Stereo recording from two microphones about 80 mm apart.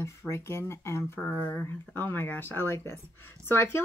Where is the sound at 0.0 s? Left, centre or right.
Left.